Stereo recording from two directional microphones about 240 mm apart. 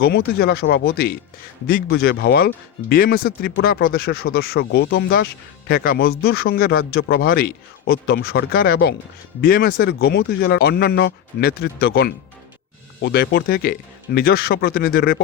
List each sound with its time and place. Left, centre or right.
0.0 s speech: left